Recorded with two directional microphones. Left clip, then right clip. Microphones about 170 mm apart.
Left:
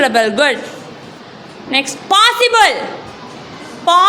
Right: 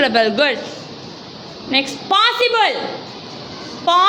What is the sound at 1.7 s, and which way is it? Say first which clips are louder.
A woman's voice: left 3 dB; 15° left (ahead or behind).